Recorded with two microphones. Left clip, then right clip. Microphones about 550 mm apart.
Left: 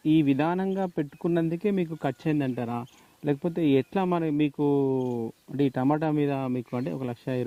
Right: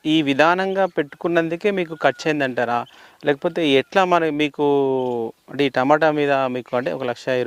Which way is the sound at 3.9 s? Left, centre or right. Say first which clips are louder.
Right 10 dB; centre.